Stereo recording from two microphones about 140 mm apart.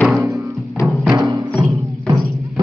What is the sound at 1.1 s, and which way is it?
Music, 30° right (ahead or behind).